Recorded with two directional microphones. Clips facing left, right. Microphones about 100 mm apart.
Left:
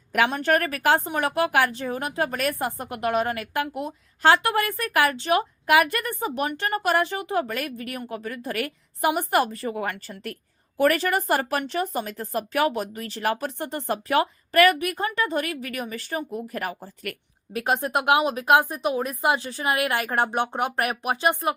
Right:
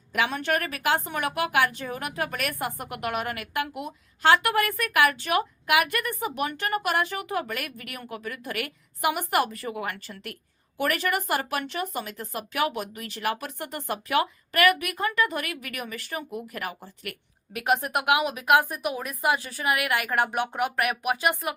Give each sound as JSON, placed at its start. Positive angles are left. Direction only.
{"t": 0.3, "sound": "speech", "side_deg": 40}